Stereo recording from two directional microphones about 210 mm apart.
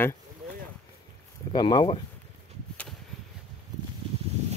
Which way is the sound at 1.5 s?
20° left (ahead or behind).